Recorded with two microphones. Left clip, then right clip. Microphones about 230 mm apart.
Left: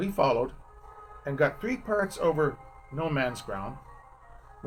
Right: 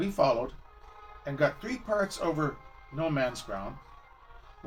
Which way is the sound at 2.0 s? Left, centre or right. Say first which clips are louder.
Left 6 dB; left.